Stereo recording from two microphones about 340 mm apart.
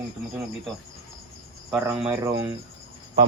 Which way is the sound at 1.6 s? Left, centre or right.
Centre.